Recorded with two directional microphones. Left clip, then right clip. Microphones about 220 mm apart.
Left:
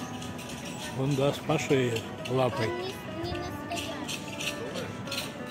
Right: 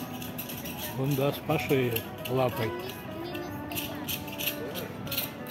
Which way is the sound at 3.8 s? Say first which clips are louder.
Left 1 dB; 45° right (ahead or behind).